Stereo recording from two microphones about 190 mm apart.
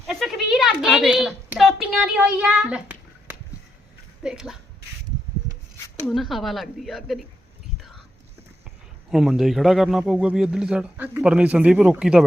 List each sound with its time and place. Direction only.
0.1 s a woman's voice: centre (ahead or behind)
6.1 s a man's voice: centre (ahead or behind)
9.0 s a man's voice: centre (ahead or behind)